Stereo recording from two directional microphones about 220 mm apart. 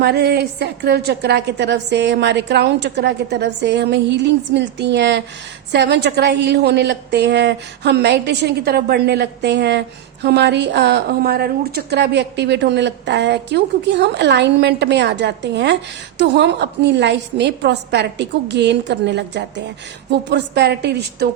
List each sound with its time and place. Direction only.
0.0 s a woman's voice: 50° right (ahead or behind)